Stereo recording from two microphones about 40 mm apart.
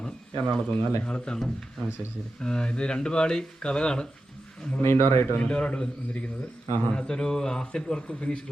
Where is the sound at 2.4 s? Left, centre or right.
Centre.